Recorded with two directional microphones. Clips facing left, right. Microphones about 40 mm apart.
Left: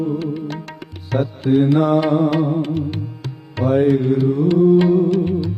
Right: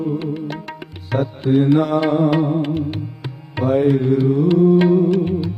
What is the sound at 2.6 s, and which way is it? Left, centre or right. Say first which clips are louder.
Music: even; centre.